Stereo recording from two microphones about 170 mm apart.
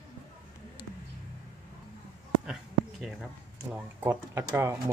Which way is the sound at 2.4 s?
5° right (ahead or behind).